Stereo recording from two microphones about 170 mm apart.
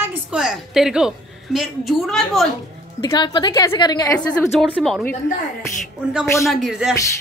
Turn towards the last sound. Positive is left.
turn(degrees=0)  # may be behind; listen again after turning